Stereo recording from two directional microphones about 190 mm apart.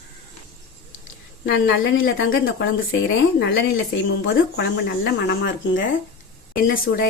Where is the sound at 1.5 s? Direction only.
85° left.